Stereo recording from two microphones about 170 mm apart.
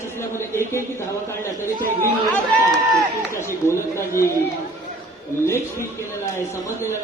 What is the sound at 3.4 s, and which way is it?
Speech, 15° left (ahead or behind).